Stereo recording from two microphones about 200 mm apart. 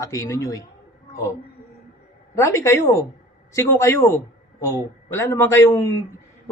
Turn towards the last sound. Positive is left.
turn(degrees=15)  # may be behind; listen again after turning